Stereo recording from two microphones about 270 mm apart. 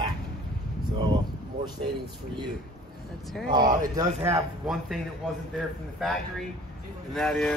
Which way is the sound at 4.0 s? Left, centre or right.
Centre.